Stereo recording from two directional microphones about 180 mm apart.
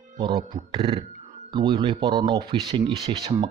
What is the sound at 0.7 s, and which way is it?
Speech, 30° right (ahead or behind).